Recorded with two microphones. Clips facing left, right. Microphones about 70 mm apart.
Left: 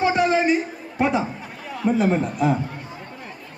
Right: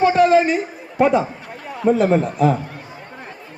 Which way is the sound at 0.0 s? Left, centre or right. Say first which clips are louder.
Right 5 dB; centre.